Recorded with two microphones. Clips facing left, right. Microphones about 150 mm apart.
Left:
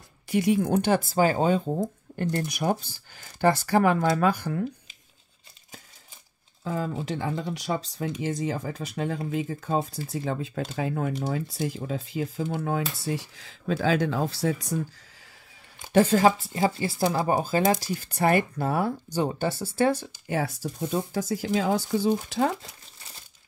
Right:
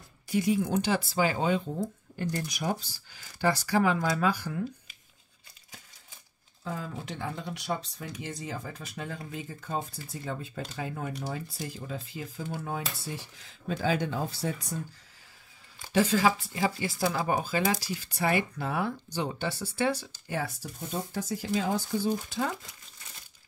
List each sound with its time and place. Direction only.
0.3 s speech: 65° left (ahead or behind)
0.7 s speech: 50° left (ahead or behind)
6.8 s speech: 90° left
15.9 s speech: 50° left (ahead or behind)
20.2 s speech: 80° left